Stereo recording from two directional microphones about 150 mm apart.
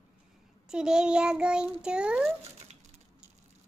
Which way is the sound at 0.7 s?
5° right (ahead or behind).